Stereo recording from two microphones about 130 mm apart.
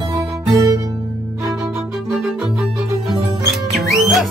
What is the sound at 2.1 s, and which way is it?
Music, centre (ahead or behind).